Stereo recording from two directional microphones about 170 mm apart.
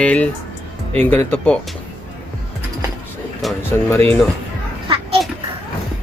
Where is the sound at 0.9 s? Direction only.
10° left (ahead or behind).